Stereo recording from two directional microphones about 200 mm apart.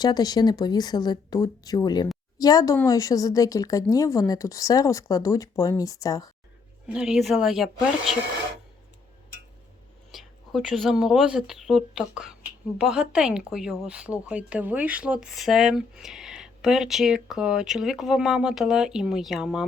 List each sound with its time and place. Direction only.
0.0 s a woman's voice: 20° left (ahead or behind)
6.8 s speech: 5° right (ahead or behind)
10.1 s speech: centre (ahead or behind)